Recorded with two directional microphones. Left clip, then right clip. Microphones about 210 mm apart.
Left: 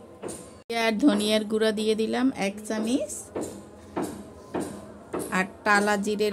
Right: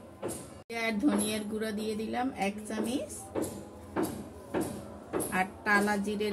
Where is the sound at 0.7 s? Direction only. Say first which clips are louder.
Left 7 dB; 55° left (ahead or behind).